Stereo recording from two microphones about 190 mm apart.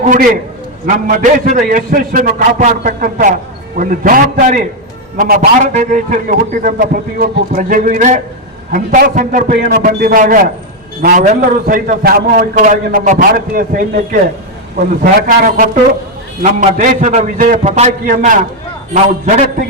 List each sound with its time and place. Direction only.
0.9 s a man's voice: 45° right (ahead or behind)
15.3 s a man's voice: 50° right (ahead or behind)